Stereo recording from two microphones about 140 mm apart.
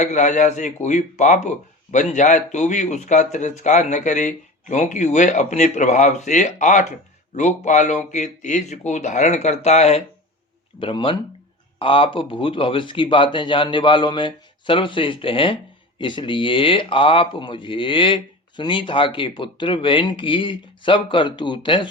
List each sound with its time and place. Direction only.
0.0 s speech: 55° left (ahead or behind)
10.8 s speech: 35° left (ahead or behind)